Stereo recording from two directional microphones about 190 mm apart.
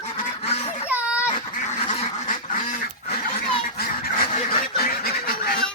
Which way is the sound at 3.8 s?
50° left (ahead or behind).